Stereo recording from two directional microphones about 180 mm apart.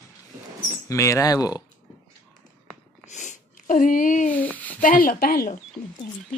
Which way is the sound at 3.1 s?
40° left (ahead or behind).